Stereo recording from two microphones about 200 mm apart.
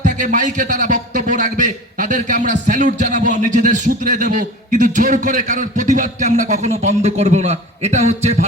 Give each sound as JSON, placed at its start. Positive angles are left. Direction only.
{"t": 0.0, "sound": "speech", "side_deg": -40}